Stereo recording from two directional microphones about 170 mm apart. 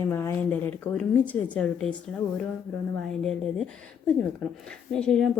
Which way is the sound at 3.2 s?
5° left (ahead or behind).